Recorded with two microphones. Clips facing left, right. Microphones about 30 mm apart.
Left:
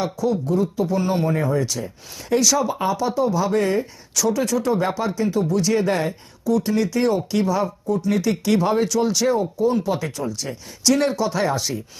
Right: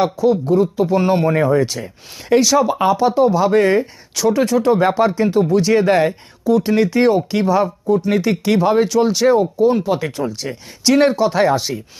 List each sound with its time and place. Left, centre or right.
0.0 s speech: right
11.5 s speech: right